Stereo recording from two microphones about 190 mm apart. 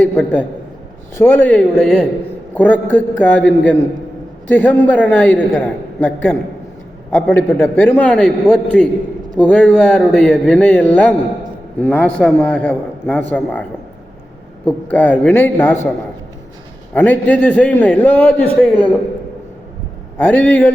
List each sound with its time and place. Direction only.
0.0 s a man's voice: 5° left (ahead or behind)
7.2 s a man's voice: 10° left (ahead or behind)
16.9 s a man's voice: 10° left (ahead or behind)
20.1 s a man's voice: 10° left (ahead or behind)